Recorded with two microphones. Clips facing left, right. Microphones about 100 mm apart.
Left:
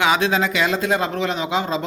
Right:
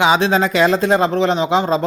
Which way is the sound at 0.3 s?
35° right (ahead or behind).